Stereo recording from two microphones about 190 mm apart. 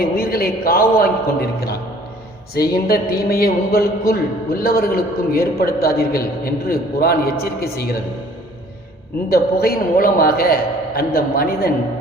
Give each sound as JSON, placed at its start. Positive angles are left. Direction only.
{"t": 0.0, "sound": "a man's voice", "side_deg": 55}
{"t": 9.3, "sound": "a man's voice", "side_deg": 55}